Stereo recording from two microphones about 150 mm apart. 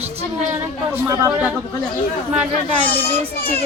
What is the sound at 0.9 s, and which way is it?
Speech, 10° right (ahead or behind).